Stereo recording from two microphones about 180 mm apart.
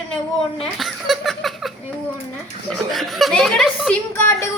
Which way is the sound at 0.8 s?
Centre (ahead or behind).